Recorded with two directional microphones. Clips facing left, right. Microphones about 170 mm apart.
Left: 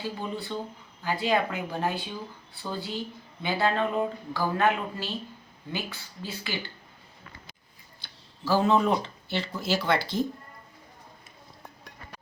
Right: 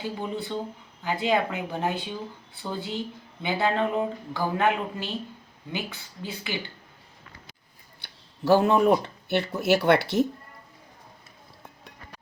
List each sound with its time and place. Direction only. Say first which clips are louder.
0.0 s speech: right 2 dB; 20° right (ahead or behind)
8.0 s speech: right 8 dB; 60° right (ahead or behind)